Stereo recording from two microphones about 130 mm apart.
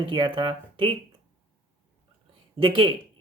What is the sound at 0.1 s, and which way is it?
Speech, 40° right (ahead or behind).